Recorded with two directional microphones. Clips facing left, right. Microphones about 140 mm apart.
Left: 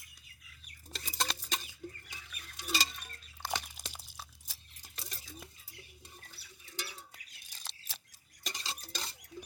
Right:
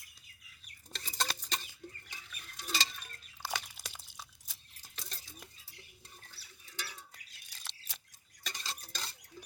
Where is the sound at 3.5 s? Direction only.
15° left (ahead or behind).